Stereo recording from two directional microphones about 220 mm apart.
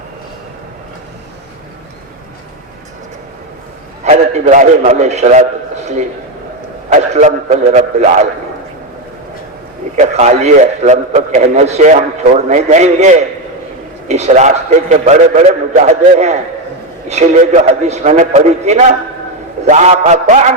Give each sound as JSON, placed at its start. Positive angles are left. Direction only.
{"t": 4.0, "sound": "a man's voice", "side_deg": -30}
{"t": 6.9, "sound": "a man's voice", "side_deg": -30}
{"t": 9.9, "sound": "a man's voice", "side_deg": -30}